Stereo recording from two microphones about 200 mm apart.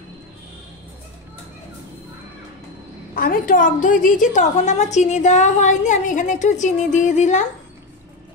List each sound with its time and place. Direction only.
3.2 s a woman's voice: 45° left (ahead or behind)